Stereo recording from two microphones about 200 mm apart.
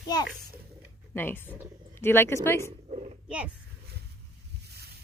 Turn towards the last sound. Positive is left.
turn(degrees=-5)  # may be behind; listen again after turning